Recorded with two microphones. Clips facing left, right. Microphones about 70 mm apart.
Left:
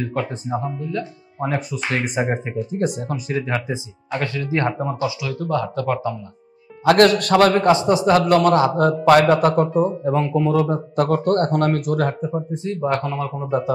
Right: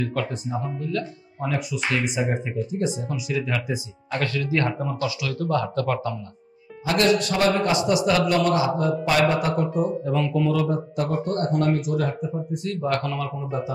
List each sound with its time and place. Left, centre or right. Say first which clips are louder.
0.0 s speech: left 2 dB; left
2.8 s a man's voice: left 5 dB; left
3.3 s speech: left 2 dB; left
4.1 s speech: left 2 dB; left
4.9 s speech: left 3 dB; centre
6.9 s a man's voice: left 7 dB; left
7.7 s speech: left 5 dB; left
8.3 s a man's voice: left 6 dB; left
11.0 s a man's voice: left 9 dB; left
12.4 s speech: left 2 dB; left
13.4 s a man's voice: left 7 dB; left